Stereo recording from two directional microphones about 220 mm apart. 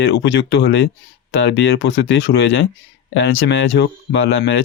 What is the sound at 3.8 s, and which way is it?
Speech, 55° left (ahead or behind).